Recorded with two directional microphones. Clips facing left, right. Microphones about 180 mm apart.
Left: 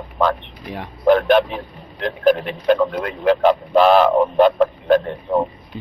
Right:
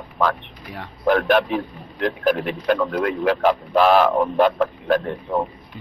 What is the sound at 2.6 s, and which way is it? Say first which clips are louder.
Speech: left 5 dB; 20° left (ahead or behind).